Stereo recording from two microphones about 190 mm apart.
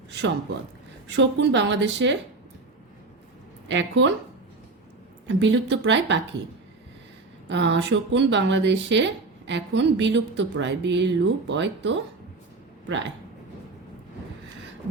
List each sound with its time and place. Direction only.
1.0 s speech: 70° right (ahead or behind)
3.7 s speech: 75° right (ahead or behind)
5.4 s speech: 70° right (ahead or behind)
7.5 s speech: 70° right (ahead or behind)